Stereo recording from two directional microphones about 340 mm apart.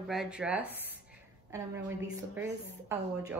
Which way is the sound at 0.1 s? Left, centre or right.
Centre.